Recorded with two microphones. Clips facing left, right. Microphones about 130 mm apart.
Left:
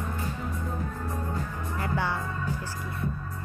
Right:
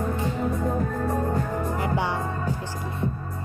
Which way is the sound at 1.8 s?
20° right (ahead or behind).